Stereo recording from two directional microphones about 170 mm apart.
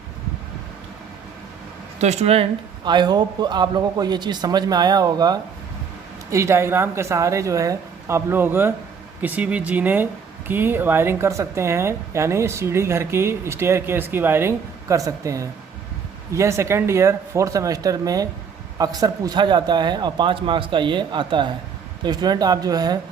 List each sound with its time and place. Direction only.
2.0 s speech: 40° right (ahead or behind); by 23.0 s 20° right (ahead or behind)